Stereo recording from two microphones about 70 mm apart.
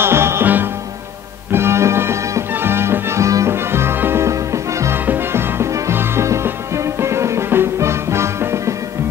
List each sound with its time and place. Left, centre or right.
0.0 s music: right
3.5 s music: right
4.9 s music: right